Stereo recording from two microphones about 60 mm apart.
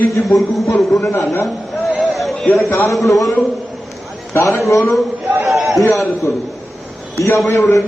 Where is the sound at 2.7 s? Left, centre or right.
Left.